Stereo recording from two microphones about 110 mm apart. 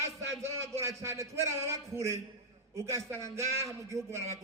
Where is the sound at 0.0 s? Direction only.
25° right (ahead or behind).